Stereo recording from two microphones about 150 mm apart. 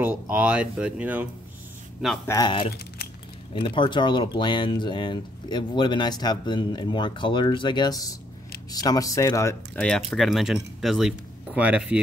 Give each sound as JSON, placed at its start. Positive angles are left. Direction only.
{"t": 0.0, "sound": "speech", "side_deg": -10}
{"t": 2.2, "sound": "speech", "side_deg": 25}
{"t": 3.5, "sound": "speech", "side_deg": 35}
{"t": 9.8, "sound": "speech", "side_deg": 5}